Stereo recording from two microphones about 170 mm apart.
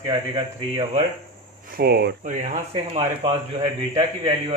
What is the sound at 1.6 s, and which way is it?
Speech, 60° right (ahead or behind).